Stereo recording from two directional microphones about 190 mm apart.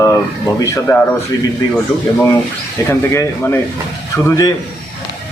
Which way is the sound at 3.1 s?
15° left (ahead or behind).